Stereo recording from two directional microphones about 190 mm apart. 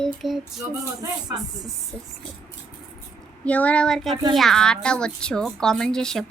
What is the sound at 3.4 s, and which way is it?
Child singing, 5° left (ahead or behind).